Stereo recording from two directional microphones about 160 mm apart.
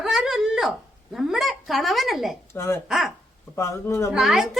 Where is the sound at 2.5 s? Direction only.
15° left (ahead or behind).